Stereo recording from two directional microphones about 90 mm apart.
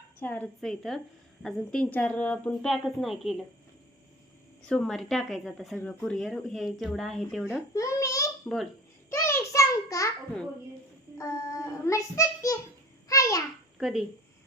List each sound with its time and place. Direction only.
0.2 s a woman's voice: 20° left (ahead or behind)
0.4 s speech: 5° left (ahead or behind)
1.8 s a woman's voice: 15° left (ahead or behind); by 3.3 s centre (ahead or behind)
4.7 s speech: 5° left (ahead or behind)
7.7 s babbling: 35° left (ahead or behind)
9.0 s a sound: 35° left (ahead or behind)
11.2 s child singing: 35° left (ahead or behind)
13.1 s a sound: 35° left (ahead or behind)
13.7 s speech: 5° right (ahead or behind)